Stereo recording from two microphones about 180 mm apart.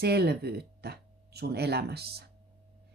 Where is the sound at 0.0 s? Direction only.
65° right (ahead or behind).